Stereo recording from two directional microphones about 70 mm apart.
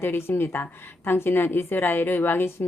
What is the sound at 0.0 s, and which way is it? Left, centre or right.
Speech, left.